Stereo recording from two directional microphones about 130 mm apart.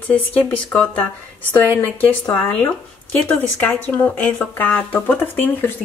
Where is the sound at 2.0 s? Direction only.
10° left (ahead or behind).